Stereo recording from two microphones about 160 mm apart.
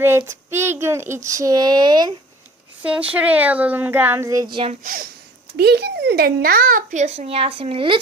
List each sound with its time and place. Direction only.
0.2 s speech: 15° right (ahead or behind)
2.8 s a child's voice: 10° right (ahead or behind); by 4.7 s 30° right (ahead or behind)
4.7 s a child's voice: 55° right (ahead or behind)
5.5 s a child's voice: 90° right; by 7.9 s 35° right (ahead or behind)